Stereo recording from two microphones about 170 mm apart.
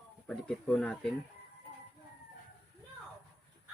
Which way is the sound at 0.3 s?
5° left (ahead or behind).